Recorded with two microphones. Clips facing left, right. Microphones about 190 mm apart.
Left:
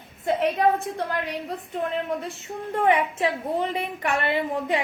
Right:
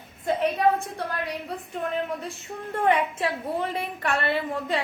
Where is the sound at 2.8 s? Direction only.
15° left (ahead or behind).